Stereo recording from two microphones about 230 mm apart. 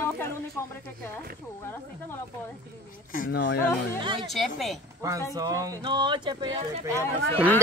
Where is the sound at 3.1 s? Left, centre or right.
Left.